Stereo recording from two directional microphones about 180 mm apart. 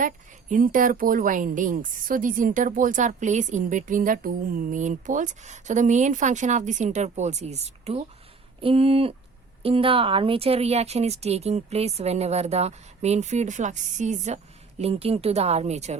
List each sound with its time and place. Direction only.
0.0 s a woman's voice: 45° right (ahead or behind)